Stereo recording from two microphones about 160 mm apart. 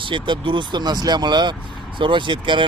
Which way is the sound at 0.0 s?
30° right (ahead or behind).